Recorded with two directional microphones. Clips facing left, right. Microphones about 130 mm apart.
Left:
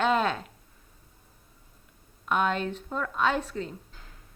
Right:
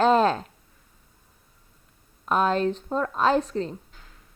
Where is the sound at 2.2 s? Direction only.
35° right (ahead or behind).